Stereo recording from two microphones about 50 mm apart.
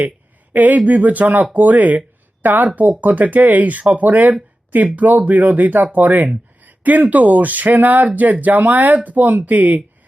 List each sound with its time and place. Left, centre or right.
0.5 s speech: right